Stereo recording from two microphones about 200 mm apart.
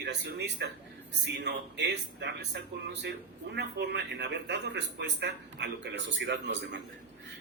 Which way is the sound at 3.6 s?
55° right (ahead or behind).